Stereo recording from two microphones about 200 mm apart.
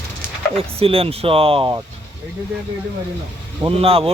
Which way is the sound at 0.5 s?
30° right (ahead or behind).